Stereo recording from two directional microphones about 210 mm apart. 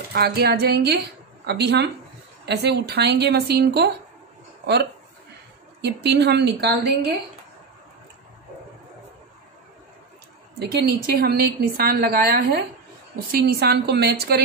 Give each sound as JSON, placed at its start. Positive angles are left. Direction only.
{"t": 0.1, "sound": "a woman's voice", "side_deg": -50}
{"t": 5.8, "sound": "a woman's voice", "side_deg": -55}
{"t": 10.6, "sound": "a woman's voice", "side_deg": -50}